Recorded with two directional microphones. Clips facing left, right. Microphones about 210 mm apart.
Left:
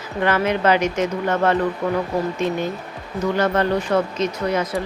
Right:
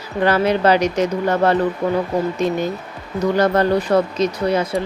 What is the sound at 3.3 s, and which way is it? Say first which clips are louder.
Speech: right 4 dB; 40° right (ahead or behind).